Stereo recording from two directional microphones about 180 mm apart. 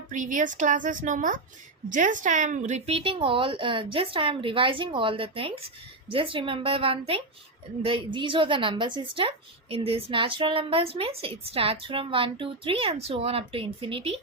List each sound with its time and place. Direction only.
0.1 s a woman's voice: 45° right (ahead or behind)